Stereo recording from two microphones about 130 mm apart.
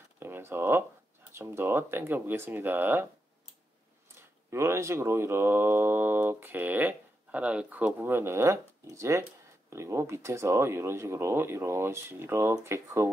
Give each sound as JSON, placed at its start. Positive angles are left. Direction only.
{"t": 0.2, "sound": "a sound", "side_deg": -20}
{"t": 1.3, "sound": "speech", "side_deg": -20}
{"t": 4.5, "sound": "speech", "side_deg": -20}